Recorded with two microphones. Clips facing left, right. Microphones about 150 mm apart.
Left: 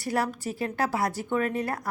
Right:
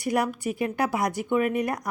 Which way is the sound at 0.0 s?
15° right (ahead or behind).